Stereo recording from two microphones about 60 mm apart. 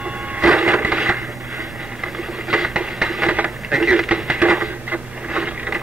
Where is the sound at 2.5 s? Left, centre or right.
Centre.